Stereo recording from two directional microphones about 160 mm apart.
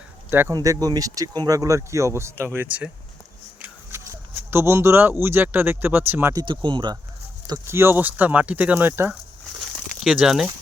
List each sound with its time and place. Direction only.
0.3 s speech: 15° right (ahead or behind)
4.5 s speech: 15° right (ahead or behind)
6.4 s speech: 30° right (ahead or behind); by 9.1 s 15° right (ahead or behind)
9.7 s a sound: centre (ahead or behind)